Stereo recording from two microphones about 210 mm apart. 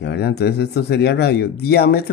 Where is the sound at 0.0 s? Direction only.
50° left (ahead or behind).